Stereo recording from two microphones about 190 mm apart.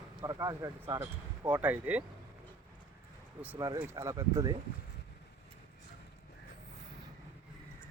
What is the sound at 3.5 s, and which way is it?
Speech, 20° right (ahead or behind).